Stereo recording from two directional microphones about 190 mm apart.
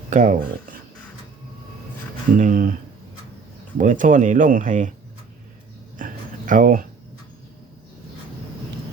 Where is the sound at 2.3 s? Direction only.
45° right (ahead or behind).